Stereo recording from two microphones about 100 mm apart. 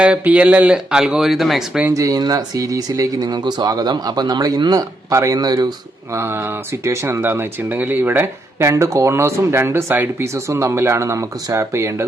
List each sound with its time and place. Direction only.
0.0 s speech: 10° right (ahead or behind)
1.9 s speech: 35° right (ahead or behind)
6.1 s speech: 25° right (ahead or behind)